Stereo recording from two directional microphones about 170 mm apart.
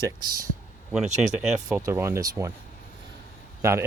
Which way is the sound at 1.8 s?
15° right (ahead or behind).